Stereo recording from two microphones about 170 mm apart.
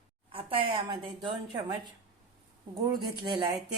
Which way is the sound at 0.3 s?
30° right (ahead or behind).